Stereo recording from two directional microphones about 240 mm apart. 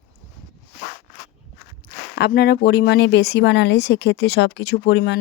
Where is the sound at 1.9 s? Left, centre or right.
Left.